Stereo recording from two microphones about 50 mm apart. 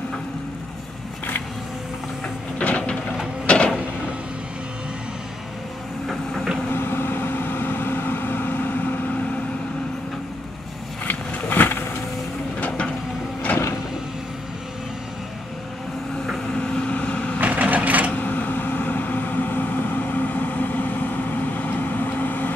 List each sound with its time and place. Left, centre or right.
2.6 s printer: left
3.4 s a sound: left
6.0 s vehicle: centre
6.7 s vehicle: left
11.1 s vehicle: left
12.5 s vehicle: left
16.5 s vehicle: left
17.4 s a sound: right
18.1 s a sound: left